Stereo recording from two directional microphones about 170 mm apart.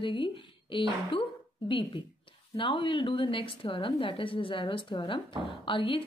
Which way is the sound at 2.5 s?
30° left (ahead or behind).